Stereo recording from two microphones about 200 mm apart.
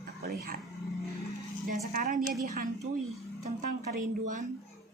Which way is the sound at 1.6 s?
45° right (ahead or behind).